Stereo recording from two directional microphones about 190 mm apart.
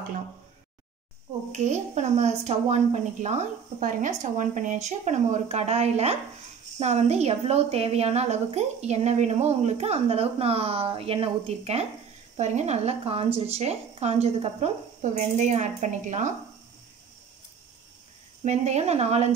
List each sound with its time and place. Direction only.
1.5 s a woman's voice: 35° right (ahead or behind)
18.4 s a woman's voice: 35° right (ahead or behind)